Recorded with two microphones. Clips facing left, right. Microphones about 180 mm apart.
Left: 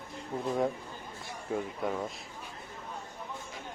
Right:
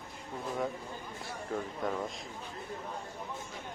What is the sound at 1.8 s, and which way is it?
Speech, 5° left (ahead or behind).